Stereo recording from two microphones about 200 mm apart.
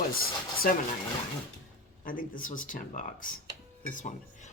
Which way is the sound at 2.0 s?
45° left (ahead or behind).